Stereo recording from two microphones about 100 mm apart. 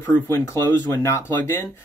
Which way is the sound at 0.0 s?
20° left (ahead or behind).